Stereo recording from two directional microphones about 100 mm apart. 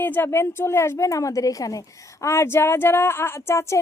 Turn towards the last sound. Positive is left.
turn(degrees=25)  # may be behind; listen again after turning